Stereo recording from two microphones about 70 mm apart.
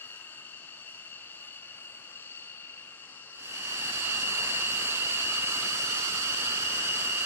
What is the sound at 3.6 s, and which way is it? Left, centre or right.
Vehicle, right.